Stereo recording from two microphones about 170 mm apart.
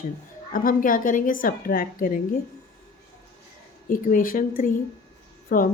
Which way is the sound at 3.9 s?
55° left (ahead or behind).